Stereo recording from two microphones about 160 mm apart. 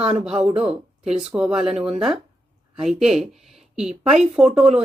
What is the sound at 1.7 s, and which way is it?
Speech, 40° right (ahead or behind).